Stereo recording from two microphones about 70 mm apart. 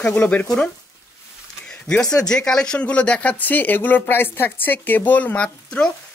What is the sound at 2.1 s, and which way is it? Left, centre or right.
Speech, centre.